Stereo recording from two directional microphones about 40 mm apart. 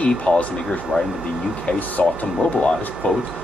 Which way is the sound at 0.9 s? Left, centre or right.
Centre.